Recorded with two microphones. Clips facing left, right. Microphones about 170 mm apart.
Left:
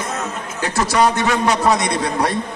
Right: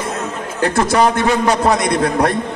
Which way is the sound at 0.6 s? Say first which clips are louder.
Right 3 dB; 55° right (ahead or behind).